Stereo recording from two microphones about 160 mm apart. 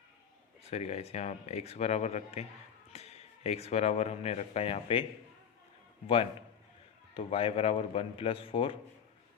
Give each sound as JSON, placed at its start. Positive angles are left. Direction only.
{"t": 0.6, "sound": "speech", "side_deg": 45}
{"t": 7.1, "sound": "speech", "side_deg": 35}